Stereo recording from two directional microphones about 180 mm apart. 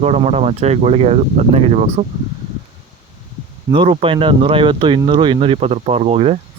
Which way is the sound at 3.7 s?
30° right (ahead or behind).